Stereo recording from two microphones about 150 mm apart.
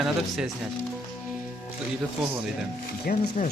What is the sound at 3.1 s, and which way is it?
Speech, 75° left (ahead or behind).